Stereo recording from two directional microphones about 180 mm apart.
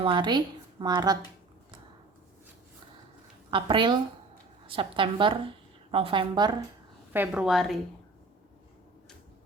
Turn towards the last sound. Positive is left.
turn(degrees=0)  # may be behind; listen again after turning